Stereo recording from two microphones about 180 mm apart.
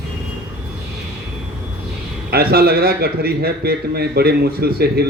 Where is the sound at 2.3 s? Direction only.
60° right (ahead or behind).